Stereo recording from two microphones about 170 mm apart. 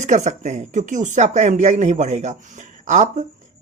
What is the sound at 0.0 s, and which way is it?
Speech, 45° right (ahead or behind).